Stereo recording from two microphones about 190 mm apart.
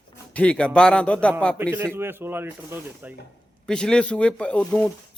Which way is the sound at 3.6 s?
5° left (ahead or behind).